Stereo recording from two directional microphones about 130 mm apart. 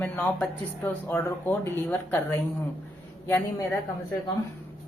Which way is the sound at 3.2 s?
20° left (ahead or behind).